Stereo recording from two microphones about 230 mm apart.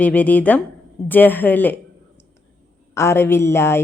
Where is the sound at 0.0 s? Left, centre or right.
Centre.